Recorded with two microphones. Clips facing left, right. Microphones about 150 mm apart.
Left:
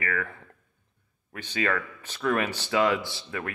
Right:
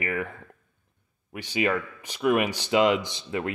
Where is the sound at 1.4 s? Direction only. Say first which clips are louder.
Right 3 dB; 15° right (ahead or behind).